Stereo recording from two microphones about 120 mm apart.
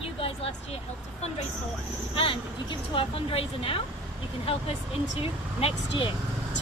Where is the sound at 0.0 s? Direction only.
55° left (ahead or behind).